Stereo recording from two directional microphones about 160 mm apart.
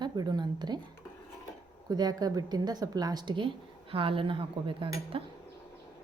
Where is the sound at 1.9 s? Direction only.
25° right (ahead or behind).